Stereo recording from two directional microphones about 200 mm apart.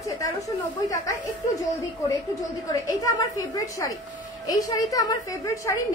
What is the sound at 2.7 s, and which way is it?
A woman's voice, 15° left (ahead or behind).